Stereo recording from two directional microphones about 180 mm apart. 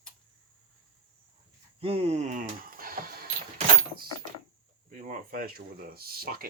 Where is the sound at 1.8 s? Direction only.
35° right (ahead or behind); by 3.3 s 55° right (ahead or behind).